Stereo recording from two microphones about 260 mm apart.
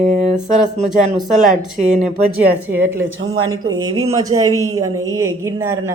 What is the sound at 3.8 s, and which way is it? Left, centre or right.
A woman's voice, centre.